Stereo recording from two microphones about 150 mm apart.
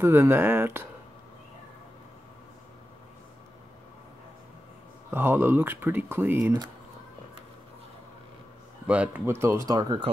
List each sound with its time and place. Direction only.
0.0 s speech: 15° right (ahead or behind)
5.1 s speech: 15° right (ahead or behind)
8.8 s speech: 10° right (ahead or behind); by 9.9 s 25° right (ahead or behind)